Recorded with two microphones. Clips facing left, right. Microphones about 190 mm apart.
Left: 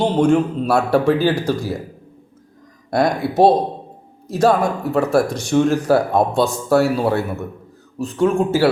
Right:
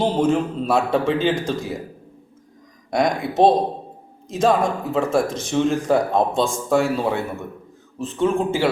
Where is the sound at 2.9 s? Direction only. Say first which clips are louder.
Left 3 dB; centre (ahead or behind).